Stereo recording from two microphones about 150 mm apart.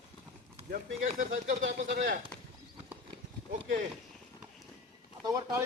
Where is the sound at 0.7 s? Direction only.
60° right (ahead or behind).